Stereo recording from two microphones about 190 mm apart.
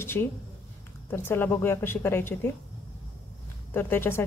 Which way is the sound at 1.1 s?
10° left (ahead or behind).